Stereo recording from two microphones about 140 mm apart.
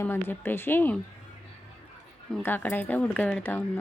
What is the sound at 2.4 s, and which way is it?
Speech, 15° left (ahead or behind).